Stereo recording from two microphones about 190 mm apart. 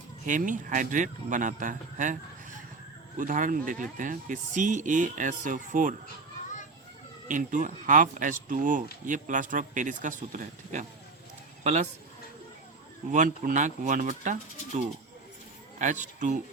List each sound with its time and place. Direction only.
0.3 s speech: 40° right (ahead or behind)
3.2 s speech: 45° right (ahead or behind)
7.3 s speech: 40° right (ahead or behind)
13.1 s speech: 45° right (ahead or behind)